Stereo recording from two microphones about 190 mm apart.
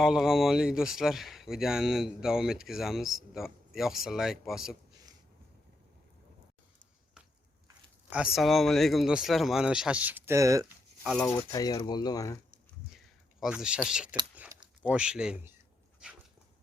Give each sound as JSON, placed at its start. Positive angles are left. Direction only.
{"t": 0.0, "sound": "speech", "side_deg": 0}
{"t": 8.1, "sound": "speech", "side_deg": -5}
{"t": 11.0, "sound": "speech", "side_deg": 5}
{"t": 11.3, "sound": "speech", "side_deg": 15}
{"t": 13.4, "sound": "speech", "side_deg": -5}